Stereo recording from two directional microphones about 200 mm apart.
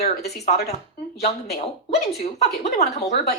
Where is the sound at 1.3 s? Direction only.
30° left (ahead or behind).